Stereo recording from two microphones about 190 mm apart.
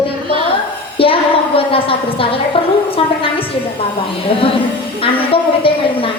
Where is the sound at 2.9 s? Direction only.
30° left (ahead or behind).